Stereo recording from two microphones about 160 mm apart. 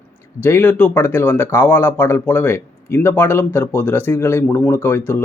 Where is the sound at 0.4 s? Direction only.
10° left (ahead or behind).